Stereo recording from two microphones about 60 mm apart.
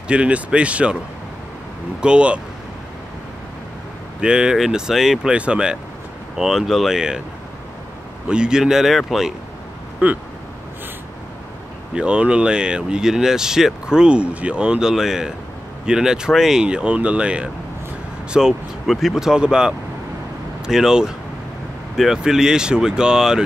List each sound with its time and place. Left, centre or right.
0.1 s speech: centre
2.0 s speech: centre
4.2 s speech: centre
5.3 s speech: centre
8.3 s speech: centre
10.0 s speech: right
11.9 s speech: centre
18.3 s speech: centre